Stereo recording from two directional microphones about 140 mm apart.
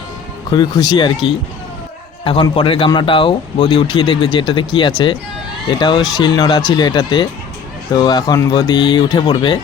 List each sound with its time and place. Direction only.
0.5 s speech: 30° left (ahead or behind)
2.2 s speech: 35° left (ahead or behind)